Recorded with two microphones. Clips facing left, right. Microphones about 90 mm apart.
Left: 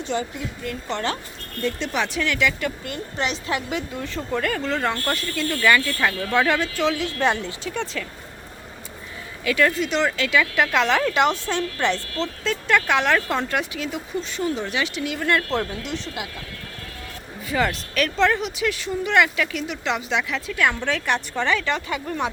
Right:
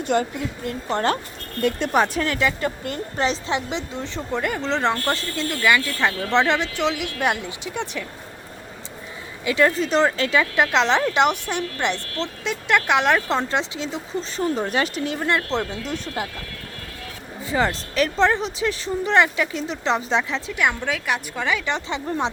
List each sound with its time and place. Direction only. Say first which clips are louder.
0.0 s speech: right 5 dB; 55° right (ahead or behind)
0.6 s speech: right 4 dB; 40° right (ahead or behind); by 8.0 s 15° right (ahead or behind)
9.4 s speech: right 1 dB; 25° right (ahead or behind)
15.8 s speech: right 2 dB; 40° right (ahead or behind)
17.4 s speech: right 1 dB; 25° right (ahead or behind)
20.5 s speech: left 2 dB; 15° right (ahead or behind)
21.7 s speech: even; 25° right (ahead or behind)